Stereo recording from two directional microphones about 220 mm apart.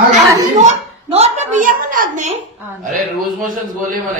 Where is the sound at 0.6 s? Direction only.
30° right (ahead or behind).